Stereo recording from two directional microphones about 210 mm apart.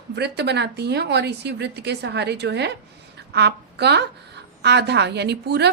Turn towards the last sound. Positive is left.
turn(degrees=-50)  # may be behind; listen again after turning